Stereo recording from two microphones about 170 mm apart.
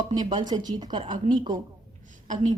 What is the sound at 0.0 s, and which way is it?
A woman's voice, 25° right (ahead or behind).